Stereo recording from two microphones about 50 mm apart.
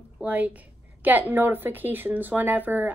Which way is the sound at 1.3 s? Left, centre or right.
Right.